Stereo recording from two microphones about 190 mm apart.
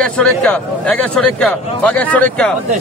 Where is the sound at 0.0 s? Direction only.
5° left (ahead or behind).